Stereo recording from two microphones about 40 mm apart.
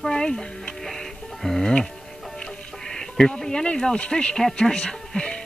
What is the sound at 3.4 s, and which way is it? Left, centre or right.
Speech, centre.